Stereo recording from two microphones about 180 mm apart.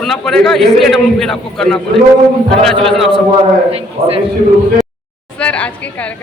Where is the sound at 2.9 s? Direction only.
Centre (ahead or behind).